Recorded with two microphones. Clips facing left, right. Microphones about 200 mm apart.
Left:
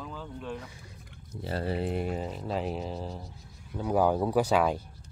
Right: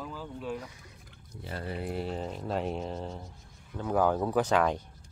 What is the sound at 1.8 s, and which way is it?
Speech, 15° left (ahead or behind).